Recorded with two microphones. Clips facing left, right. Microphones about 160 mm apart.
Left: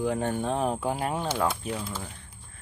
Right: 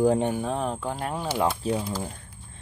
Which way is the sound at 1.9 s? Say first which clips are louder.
Right 6 dB; 35° right (ahead or behind).